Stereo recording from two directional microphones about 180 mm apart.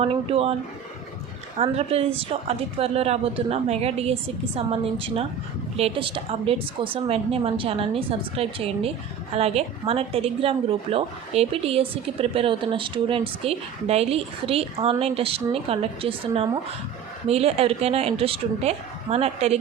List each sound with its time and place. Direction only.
0.0 s a woman's voice: 35° right (ahead or behind)
1.5 s a woman's voice: 35° right (ahead or behind)